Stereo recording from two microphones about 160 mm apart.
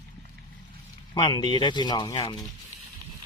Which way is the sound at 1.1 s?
30° left (ahead or behind).